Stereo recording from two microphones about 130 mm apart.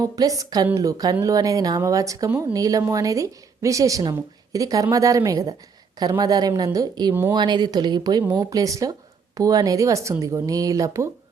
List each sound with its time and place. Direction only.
0.0 s speech: 25° right (ahead or behind)
7.1 s speech: 15° right (ahead or behind)
7.3 s speech: 35° right (ahead or behind)
8.2 s speech: 15° right (ahead or behind)
8.4 s speech: 25° right (ahead or behind)